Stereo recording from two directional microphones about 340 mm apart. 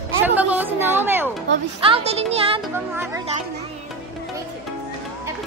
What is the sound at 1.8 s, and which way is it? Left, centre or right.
Speech, centre.